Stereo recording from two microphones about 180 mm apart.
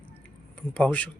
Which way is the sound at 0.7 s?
5° left (ahead or behind).